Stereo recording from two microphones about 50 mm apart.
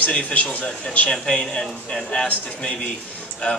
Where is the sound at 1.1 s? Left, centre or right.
Centre.